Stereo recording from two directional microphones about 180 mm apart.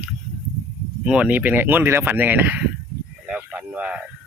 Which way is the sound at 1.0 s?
5° right (ahead or behind).